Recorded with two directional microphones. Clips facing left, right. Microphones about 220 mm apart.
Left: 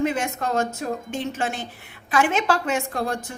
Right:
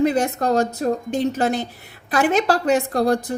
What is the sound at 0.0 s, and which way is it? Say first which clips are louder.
A woman's voice: right 5 dB; 35° right (ahead or behind).